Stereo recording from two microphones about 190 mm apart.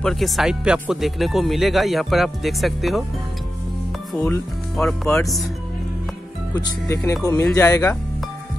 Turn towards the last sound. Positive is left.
turn(degrees=15)  # may be behind; listen again after turning